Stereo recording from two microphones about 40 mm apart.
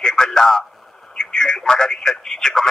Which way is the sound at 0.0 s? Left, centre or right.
Centre.